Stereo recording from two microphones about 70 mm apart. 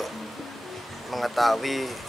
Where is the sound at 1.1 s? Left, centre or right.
Centre.